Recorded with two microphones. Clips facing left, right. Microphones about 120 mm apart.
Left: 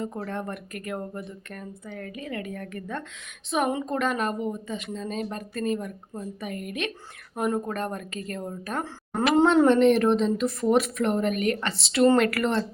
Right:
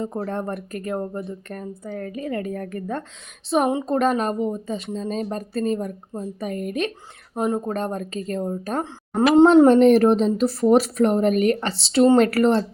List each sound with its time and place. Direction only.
0.0 s speech: 35° right (ahead or behind)
7.3 s speech: 25° right (ahead or behind)